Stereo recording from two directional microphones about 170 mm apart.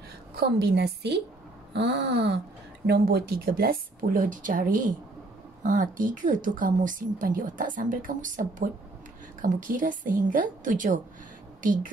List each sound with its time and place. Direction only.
0.4 s a woman's voice: 75° right (ahead or behind)
1.7 s a sound: 85° right
2.9 s a woman's voice: 65° right (ahead or behind)